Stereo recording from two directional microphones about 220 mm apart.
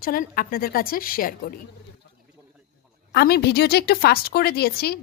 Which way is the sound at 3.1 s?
45° left (ahead or behind).